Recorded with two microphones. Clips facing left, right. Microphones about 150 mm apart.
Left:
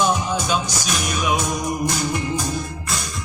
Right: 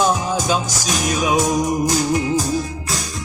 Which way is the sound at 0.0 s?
40° right (ahead or behind).